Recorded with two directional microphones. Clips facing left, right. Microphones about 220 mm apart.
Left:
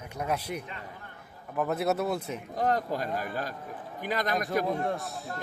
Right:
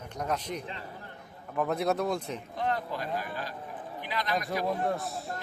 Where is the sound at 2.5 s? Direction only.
40° left (ahead or behind).